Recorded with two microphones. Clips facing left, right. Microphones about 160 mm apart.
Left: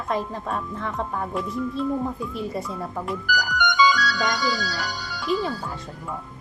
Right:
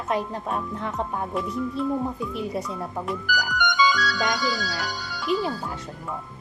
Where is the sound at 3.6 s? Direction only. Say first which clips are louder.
Left 2 dB; 80° left.